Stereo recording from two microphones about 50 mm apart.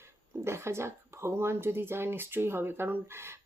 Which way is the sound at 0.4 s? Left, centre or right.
Right.